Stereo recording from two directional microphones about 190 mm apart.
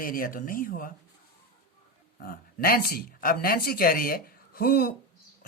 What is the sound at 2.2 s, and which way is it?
Speech, 50° left (ahead or behind).